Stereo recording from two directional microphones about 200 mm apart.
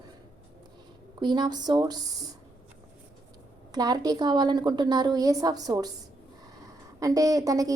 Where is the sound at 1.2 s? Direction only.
20° right (ahead or behind).